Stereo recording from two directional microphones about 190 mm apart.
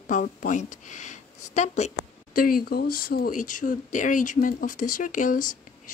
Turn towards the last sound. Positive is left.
turn(degrees=45)  # may be behind; listen again after turning